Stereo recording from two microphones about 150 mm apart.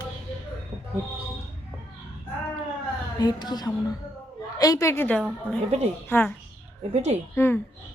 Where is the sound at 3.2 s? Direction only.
30° left (ahead or behind).